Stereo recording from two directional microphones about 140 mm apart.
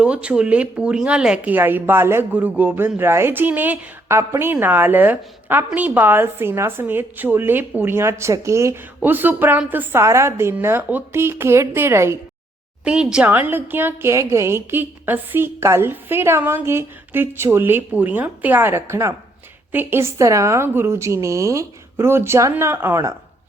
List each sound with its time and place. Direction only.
0.0 s a woman's voice: 10° right (ahead or behind)
12.8 s a woman's voice: 5° right (ahead or behind)